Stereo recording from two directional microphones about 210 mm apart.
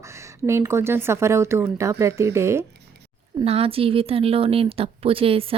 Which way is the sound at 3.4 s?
30° right (ahead or behind).